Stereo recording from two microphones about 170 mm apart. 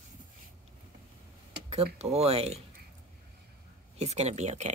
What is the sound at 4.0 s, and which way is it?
Speech, 40° right (ahead or behind).